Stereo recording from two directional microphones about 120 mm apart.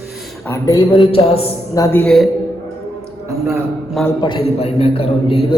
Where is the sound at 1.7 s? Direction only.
20° left (ahead or behind).